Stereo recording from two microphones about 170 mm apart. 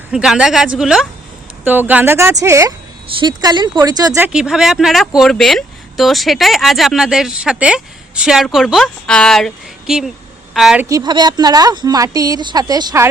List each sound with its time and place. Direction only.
0.1 s speech: 5° right (ahead or behind); by 4.2 s 20° right (ahead or behind)
4.2 s speech: 5° right (ahead or behind)
10.8 s speech: 25° right (ahead or behind)